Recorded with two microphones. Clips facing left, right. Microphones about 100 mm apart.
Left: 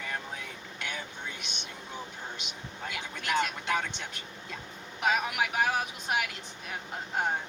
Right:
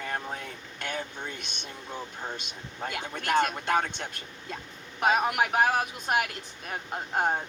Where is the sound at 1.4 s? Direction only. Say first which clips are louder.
Right 1 dB; 40° right (ahead or behind).